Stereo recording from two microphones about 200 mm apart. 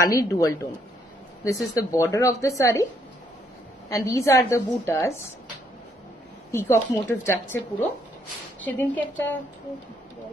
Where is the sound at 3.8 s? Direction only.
15° left (ahead or behind).